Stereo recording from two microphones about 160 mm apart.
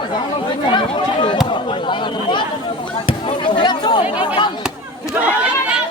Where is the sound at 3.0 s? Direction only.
30° left (ahead or behind).